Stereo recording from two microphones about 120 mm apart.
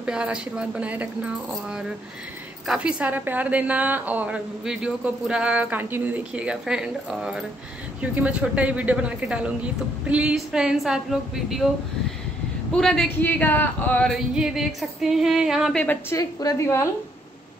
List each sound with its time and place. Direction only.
0.0 s a woman's voice: 10° right (ahead or behind)
10.0 s music: 10° right (ahead or behind)
12.7 s music: 5° left (ahead or behind)
13.2 s speech: 15° left (ahead or behind)
14.0 s music: 5° right (ahead or behind)
15.7 s speech: 10° left (ahead or behind)
16.1 s a woman's voice: 30° left (ahead or behind)